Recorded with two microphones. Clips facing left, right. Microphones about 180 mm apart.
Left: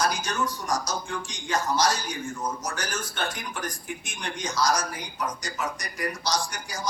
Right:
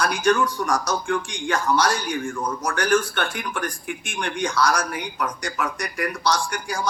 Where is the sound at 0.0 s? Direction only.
60° right (ahead or behind).